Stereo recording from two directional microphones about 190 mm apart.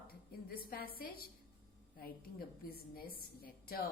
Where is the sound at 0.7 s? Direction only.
50° left (ahead or behind).